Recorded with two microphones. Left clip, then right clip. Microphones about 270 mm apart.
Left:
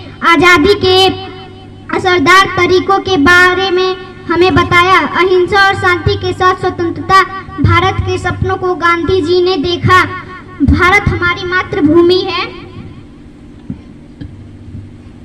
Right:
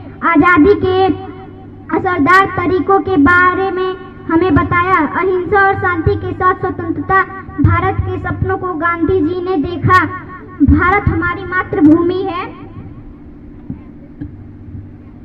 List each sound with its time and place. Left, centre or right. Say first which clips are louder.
0.2 s a man's voice: left 3 dB; left